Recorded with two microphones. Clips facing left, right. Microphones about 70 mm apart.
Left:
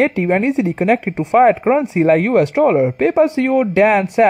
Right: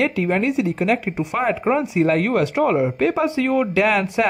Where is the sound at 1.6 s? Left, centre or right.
Left.